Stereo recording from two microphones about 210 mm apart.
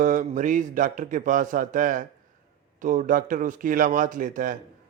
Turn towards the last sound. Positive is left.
turn(degrees=-40)  # may be behind; listen again after turning